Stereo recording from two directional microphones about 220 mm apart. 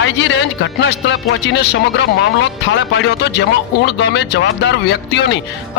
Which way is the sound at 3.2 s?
50° left (ahead or behind).